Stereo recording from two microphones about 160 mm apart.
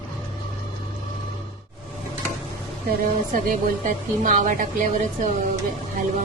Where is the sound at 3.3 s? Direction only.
55° right (ahead or behind).